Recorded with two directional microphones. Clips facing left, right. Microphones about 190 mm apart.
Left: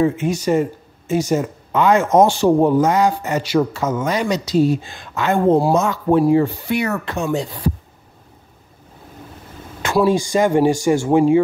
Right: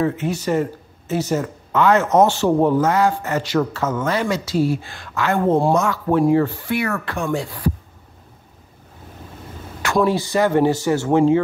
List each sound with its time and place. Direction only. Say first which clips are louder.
0.2 s speech: left 3 dB; 15° left (ahead or behind)
10.0 s speech: left 4 dB; 15° left (ahead or behind)